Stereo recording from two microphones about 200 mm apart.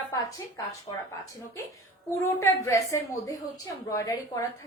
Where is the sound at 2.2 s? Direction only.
15° left (ahead or behind).